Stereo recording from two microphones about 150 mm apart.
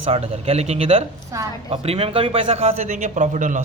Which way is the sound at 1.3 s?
20° right (ahead or behind).